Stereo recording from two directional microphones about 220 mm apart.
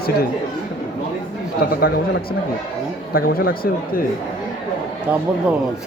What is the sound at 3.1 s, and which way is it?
Speech, 40° left (ahead or behind).